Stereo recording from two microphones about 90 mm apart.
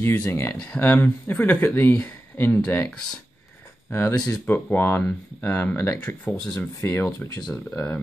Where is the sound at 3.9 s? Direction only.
30° left (ahead or behind).